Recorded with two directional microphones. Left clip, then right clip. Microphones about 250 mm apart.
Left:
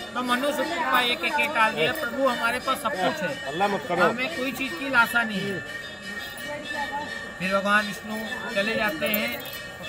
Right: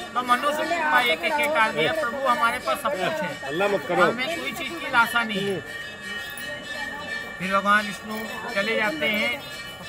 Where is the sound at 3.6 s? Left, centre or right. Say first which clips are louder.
Right 2 dB; right.